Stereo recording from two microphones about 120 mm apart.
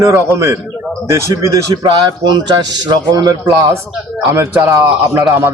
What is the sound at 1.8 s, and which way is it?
A man's voice, 35° right (ahead or behind).